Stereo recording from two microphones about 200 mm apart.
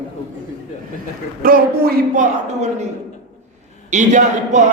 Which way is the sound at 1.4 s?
45° right (ahead or behind).